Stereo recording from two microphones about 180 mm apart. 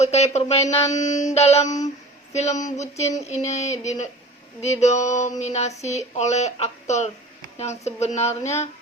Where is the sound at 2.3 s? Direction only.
40° left (ahead or behind).